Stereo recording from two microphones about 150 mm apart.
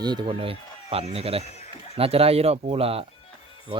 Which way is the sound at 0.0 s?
30° right (ahead or behind).